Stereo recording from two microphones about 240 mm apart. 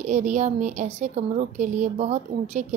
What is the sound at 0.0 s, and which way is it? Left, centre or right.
A woman's voice, right.